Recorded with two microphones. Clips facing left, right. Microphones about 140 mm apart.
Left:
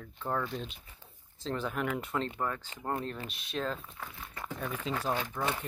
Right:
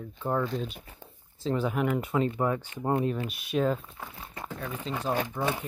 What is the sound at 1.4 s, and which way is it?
Speech, 5° right (ahead or behind).